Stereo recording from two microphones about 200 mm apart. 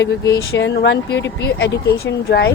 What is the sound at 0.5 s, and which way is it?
A woman's voice, 60° left (ahead or behind).